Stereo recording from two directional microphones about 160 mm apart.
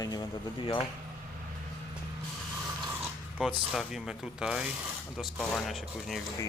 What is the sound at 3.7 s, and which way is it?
Speech, centre (ahead or behind).